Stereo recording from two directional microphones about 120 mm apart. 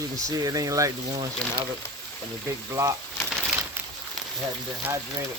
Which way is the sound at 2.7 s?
30° right (ahead or behind).